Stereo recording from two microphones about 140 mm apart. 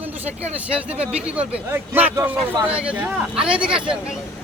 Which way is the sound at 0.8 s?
10° right (ahead or behind).